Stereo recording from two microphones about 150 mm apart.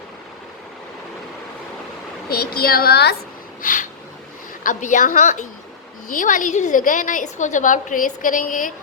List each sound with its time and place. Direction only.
2.3 s speech: 90° left
3.6 s a woman's voice: 65° left (ahead or behind)